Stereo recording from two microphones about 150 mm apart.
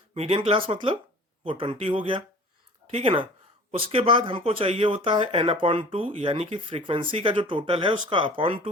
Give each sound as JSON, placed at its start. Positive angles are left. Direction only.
{"t": 0.1, "sound": "speech", "side_deg": -40}